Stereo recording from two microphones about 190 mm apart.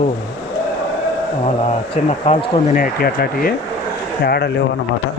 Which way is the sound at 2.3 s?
30° left (ahead or behind).